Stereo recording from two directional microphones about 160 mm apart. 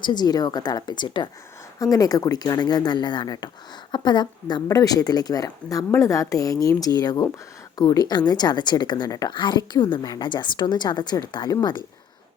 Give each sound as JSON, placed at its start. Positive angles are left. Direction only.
{"t": 0.0, "sound": "a woman's voice", "side_deg": 25}